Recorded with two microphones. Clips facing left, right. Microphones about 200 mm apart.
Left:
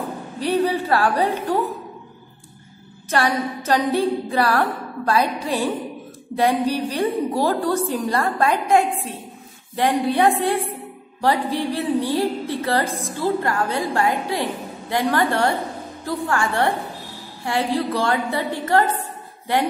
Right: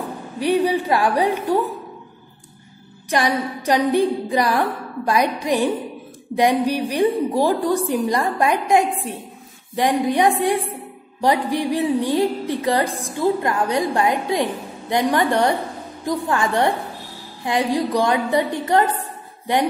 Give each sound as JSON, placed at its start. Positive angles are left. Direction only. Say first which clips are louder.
{"t": 0.4, "sound": "a woman's voice", "louder": "right 2 dB", "side_deg": -15}
{"t": 3.1, "sound": "a woman's voice", "louder": "right 1 dB", "side_deg": -15}